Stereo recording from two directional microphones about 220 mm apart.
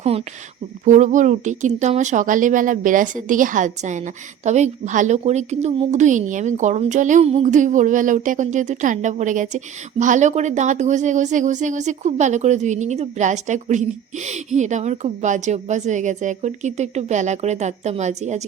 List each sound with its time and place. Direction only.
0.0 s a woman's voice: 25° right (ahead or behind)